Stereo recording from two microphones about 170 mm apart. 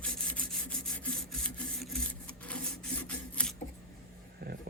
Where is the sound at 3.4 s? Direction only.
5° left (ahead or behind).